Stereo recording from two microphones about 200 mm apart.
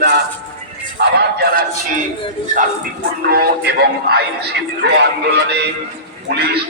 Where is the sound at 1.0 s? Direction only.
60° right (ahead or behind).